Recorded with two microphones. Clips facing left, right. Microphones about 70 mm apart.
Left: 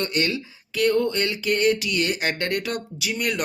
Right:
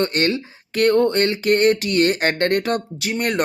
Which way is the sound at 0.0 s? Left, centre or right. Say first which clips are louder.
Right 5 dB; right.